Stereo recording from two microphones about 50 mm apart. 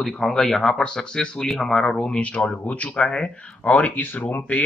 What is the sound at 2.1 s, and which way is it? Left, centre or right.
Speech, left.